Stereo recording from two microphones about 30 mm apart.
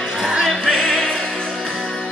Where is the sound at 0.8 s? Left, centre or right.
Centre.